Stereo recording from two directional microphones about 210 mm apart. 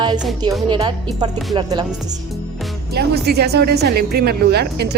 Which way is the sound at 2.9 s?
50° right (ahead or behind).